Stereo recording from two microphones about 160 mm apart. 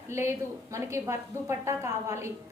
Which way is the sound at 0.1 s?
15° right (ahead or behind).